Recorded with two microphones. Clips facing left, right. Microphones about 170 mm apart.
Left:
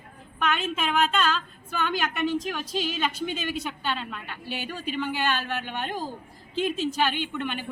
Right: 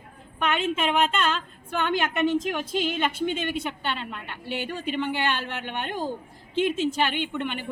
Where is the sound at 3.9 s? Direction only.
20° right (ahead or behind).